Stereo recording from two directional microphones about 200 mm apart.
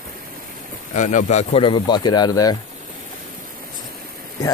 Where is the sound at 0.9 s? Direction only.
40° left (ahead or behind); by 2.5 s 20° left (ahead or behind).